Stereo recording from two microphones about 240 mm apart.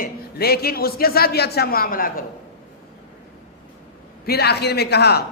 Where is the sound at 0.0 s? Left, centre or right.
Left.